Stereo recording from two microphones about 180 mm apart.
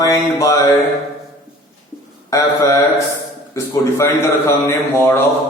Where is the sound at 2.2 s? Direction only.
15° left (ahead or behind).